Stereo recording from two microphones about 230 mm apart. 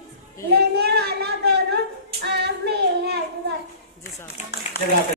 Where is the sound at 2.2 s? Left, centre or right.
Right.